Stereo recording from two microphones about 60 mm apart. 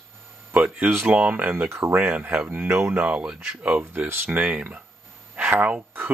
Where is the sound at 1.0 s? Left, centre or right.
Right.